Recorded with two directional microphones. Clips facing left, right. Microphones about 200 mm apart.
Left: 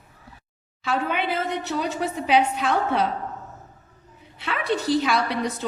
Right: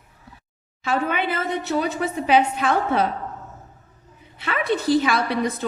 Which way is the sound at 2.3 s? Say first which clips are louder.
Right 2 dB; 50° right (ahead or behind).